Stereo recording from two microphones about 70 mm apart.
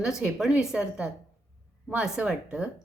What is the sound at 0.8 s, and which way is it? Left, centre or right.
A woman's voice, centre.